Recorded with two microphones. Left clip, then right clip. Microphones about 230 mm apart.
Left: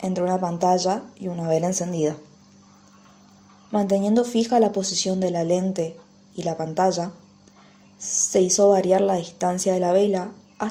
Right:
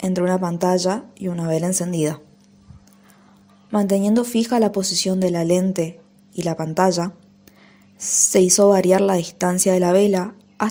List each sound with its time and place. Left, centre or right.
0.0 s speech: right
3.7 s speech: right